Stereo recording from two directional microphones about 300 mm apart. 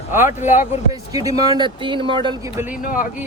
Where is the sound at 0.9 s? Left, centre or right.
Centre.